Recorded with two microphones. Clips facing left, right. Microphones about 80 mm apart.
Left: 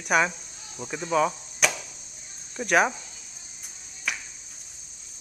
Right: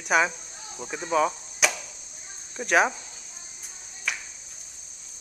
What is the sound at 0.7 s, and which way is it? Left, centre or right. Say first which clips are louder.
Cricket: even; centre.